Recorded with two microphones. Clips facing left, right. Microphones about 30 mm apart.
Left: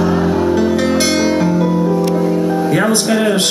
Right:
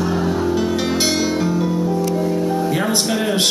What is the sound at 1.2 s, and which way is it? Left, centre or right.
Music, centre.